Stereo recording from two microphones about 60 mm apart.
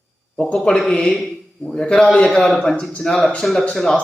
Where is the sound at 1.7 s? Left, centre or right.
Centre.